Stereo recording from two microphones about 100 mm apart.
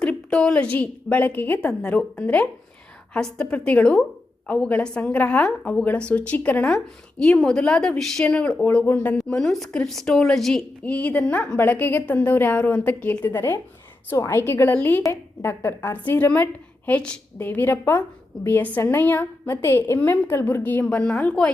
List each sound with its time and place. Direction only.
0.0 s a woman's voice: 10° left (ahead or behind)
9.1 s a woman's voice: 5° left (ahead or behind)
14.1 s a woman's voice: 25° left (ahead or behind)
20.8 s a woman's voice: 10° left (ahead or behind)